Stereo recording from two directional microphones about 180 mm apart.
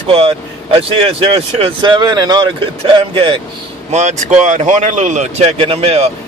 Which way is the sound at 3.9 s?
40° right (ahead or behind).